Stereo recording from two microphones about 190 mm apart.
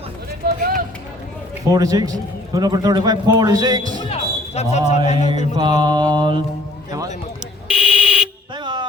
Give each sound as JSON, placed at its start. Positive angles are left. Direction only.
{"t": 0.4, "sound": "run", "side_deg": -50}
{"t": 1.7, "sound": "a man's voice", "side_deg": -20}
{"t": 3.9, "sound": "speech", "side_deg": 35}
{"t": 5.5, "sound": "a man's voice", "side_deg": -25}
{"t": 7.7, "sound": "fire alarm", "side_deg": -5}
{"t": 8.5, "sound": "music", "side_deg": -25}